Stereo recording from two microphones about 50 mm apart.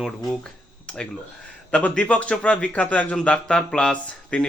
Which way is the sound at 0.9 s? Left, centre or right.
Left.